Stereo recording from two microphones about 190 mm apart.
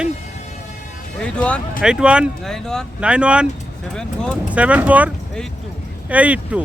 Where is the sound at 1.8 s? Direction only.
5° right (ahead or behind).